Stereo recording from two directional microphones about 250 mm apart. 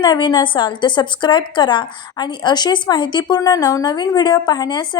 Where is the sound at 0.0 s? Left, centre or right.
Centre.